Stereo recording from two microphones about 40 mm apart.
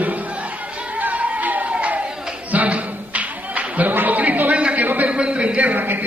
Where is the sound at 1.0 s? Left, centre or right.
Right.